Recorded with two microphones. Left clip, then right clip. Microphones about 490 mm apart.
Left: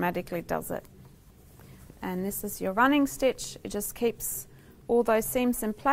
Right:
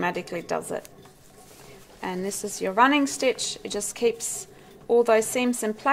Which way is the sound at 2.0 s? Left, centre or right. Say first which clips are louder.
Right 4 dB; left.